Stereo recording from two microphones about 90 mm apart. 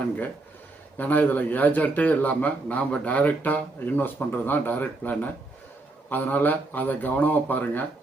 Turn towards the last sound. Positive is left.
turn(degrees=20)  # may be behind; listen again after turning